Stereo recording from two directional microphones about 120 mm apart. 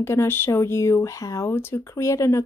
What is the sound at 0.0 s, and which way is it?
Speech, 20° left (ahead or behind).